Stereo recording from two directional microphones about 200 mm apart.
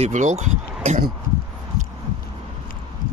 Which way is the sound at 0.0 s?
35° right (ahead or behind).